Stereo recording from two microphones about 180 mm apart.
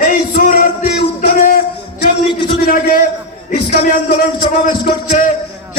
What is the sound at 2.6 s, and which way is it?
A man's voice, 50° left (ahead or behind).